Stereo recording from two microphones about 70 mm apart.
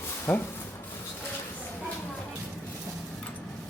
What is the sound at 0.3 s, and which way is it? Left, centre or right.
Speech, left.